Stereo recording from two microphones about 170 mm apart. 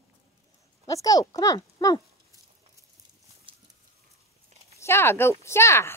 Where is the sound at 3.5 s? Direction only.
30° right (ahead or behind).